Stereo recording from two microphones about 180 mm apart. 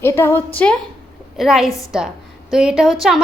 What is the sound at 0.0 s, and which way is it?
A woman's voice, 15° left (ahead or behind).